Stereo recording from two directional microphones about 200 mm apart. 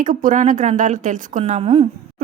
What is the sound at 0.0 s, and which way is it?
Speech, 40° right (ahead or behind).